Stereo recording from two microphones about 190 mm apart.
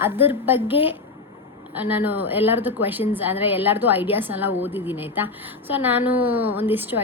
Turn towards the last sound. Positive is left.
turn(degrees=-10)  # may be behind; listen again after turning